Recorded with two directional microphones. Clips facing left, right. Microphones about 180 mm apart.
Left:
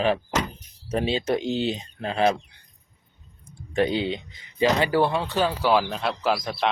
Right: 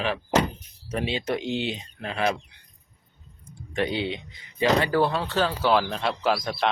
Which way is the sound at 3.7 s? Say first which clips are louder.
Left 3 dB; 25° left (ahead or behind).